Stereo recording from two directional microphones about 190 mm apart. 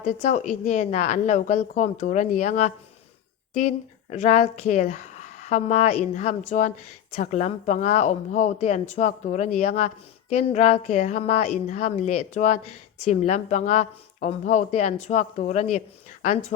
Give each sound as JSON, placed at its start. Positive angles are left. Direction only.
{"t": 0.0, "sound": "a woman's voice", "side_deg": 35}
{"t": 4.1, "sound": "a woman's voice", "side_deg": 35}